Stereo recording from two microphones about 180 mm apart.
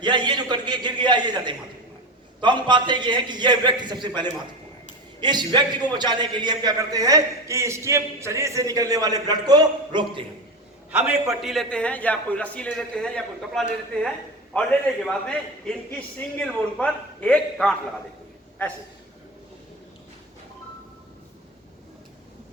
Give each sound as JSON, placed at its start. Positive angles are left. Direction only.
{"t": 0.0, "sound": "a man's voice", "side_deg": -25}
{"t": 10.9, "sound": "a man's voice", "side_deg": -5}